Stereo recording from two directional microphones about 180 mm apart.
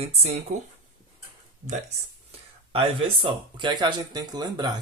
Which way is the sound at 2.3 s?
30° right (ahead or behind).